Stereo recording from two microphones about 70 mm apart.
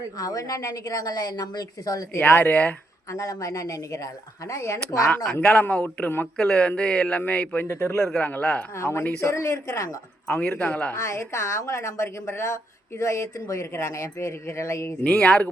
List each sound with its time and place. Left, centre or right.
0.2 s a woman's voice: left
2.1 s speech: left
2.5 s a man's voice: left
3.1 s speech: left
5.1 s a man's voice: centre
7.7 s speech: left
7.9 s speech: centre
8.2 s a man's voice: centre
8.7 s speech: left
10.2 s a man's voice: centre
10.9 s speech: left
15.0 s speech: centre